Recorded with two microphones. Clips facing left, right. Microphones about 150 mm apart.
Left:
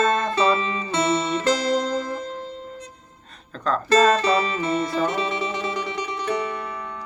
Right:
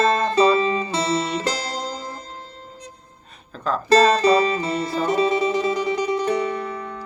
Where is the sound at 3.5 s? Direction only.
5° right (ahead or behind).